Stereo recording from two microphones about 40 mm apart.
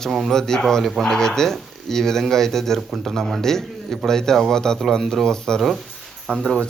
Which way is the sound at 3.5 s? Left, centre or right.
Centre.